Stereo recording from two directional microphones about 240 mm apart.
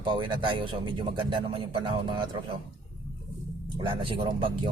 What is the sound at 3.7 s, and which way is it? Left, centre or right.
Speech, right.